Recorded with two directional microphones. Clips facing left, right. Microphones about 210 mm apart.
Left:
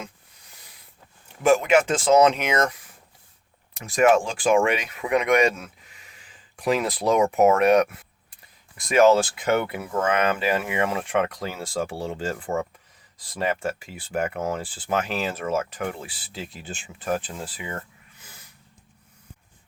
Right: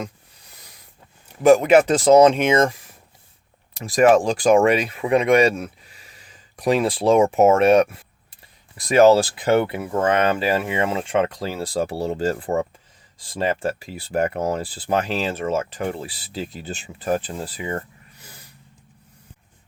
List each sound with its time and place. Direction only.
1.5 s speech: 35° right (ahead or behind)
3.8 s speech: 35° right (ahead or behind)